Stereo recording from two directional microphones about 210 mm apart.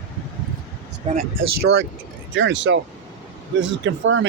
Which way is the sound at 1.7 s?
55° right (ahead or behind).